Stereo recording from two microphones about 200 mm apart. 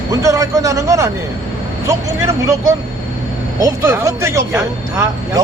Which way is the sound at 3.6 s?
15° right (ahead or behind).